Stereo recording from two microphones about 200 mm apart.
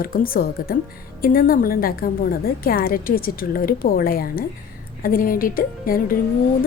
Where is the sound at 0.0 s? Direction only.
45° left (ahead or behind).